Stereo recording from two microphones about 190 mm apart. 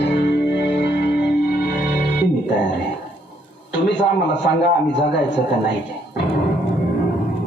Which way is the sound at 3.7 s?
65° left (ahead or behind).